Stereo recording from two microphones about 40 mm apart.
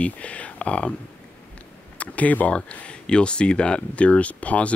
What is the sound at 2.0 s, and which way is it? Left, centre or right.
Speech, left.